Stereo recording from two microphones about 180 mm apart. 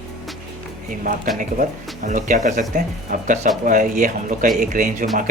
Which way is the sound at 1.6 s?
45° right (ahead or behind).